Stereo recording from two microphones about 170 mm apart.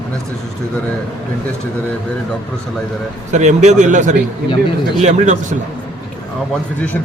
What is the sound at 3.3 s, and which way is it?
A man's voice, 45° right (ahead or behind).